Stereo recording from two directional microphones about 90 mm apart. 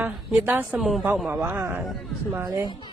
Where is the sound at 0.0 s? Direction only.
20° right (ahead or behind).